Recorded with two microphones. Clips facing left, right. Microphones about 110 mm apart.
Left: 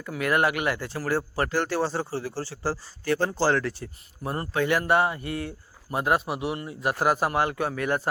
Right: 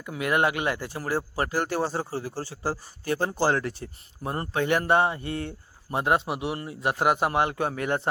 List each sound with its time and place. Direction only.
0.0 s speech: 20° right (ahead or behind)